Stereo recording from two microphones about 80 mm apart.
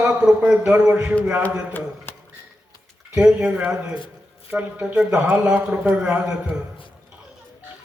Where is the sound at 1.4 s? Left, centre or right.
Left.